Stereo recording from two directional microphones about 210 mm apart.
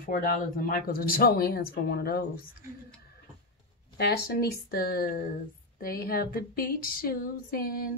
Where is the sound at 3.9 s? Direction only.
50° left (ahead or behind).